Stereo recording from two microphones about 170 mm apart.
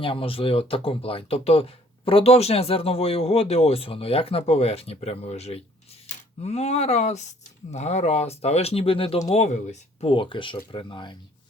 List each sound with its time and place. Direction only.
0.0 s speech: 30° left (ahead or behind)